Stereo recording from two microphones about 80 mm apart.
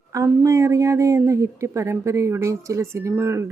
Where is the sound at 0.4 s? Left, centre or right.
Right.